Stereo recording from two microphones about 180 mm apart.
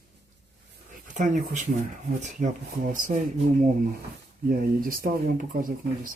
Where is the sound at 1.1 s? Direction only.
45° right (ahead or behind).